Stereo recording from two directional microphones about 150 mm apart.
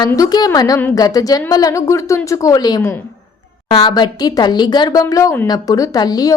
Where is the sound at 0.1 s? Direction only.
25° left (ahead or behind).